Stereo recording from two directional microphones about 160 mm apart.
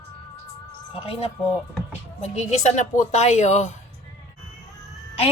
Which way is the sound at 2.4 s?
45° left (ahead or behind).